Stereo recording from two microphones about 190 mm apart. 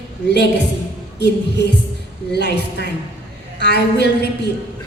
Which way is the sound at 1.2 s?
65° left (ahead or behind).